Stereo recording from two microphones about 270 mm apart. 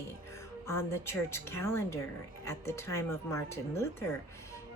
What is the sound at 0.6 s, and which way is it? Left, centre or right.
Speech, centre.